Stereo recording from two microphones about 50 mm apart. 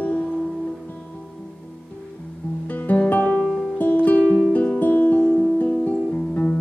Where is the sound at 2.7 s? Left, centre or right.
Left.